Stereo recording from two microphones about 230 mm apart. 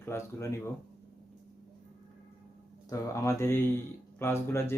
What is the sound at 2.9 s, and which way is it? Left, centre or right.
Speech, centre.